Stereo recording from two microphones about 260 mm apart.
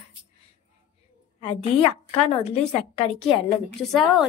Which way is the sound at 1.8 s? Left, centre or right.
Left.